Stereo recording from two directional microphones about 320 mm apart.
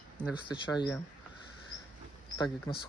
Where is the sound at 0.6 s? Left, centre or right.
Centre.